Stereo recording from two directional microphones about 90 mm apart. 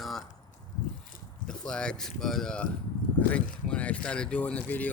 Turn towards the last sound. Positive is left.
turn(degrees=20)  # may be behind; listen again after turning